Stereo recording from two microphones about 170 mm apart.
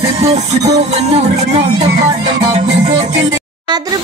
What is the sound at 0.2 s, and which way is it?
Music, 40° right (ahead or behind).